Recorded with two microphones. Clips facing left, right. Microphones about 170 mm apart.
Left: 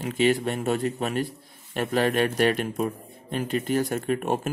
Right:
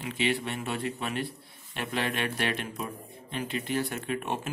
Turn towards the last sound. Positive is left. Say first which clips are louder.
# left 7 dB
turn(degrees=45)  # may be behind; listen again after turning